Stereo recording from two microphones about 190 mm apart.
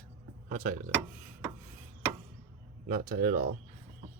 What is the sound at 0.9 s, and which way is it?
Speech, 10° right (ahead or behind).